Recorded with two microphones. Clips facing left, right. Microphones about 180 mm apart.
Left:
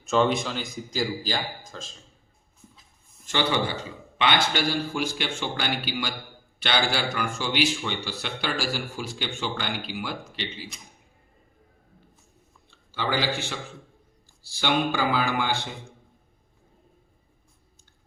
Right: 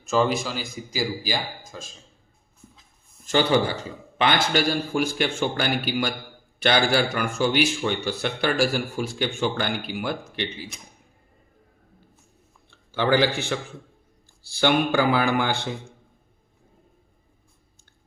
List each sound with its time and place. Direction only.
0.0 s a man's voice: centre (ahead or behind)
3.2 s a man's voice: 40° right (ahead or behind)
12.9 s a man's voice: 60° right (ahead or behind)
14.6 s a man's voice: 55° right (ahead or behind)